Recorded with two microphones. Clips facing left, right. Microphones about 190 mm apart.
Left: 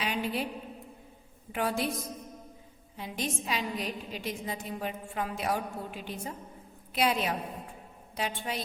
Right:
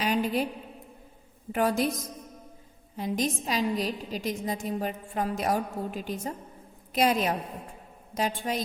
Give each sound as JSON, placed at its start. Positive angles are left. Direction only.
{"t": 0.0, "sound": "a sound", "side_deg": -45}
{"t": 1.5, "sound": "a woman's voice", "side_deg": -40}
{"t": 3.0, "sound": "a woman's voice", "side_deg": -40}